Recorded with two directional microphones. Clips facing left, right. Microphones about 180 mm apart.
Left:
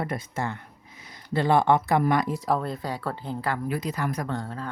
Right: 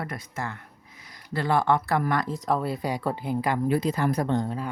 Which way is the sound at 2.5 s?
5° right (ahead or behind).